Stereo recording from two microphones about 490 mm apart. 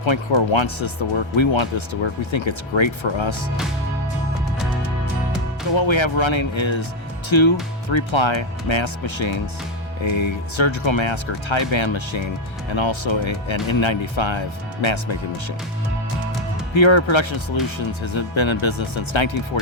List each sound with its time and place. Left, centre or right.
0.0 s speech: left
5.7 s speech: left
16.7 s speech: left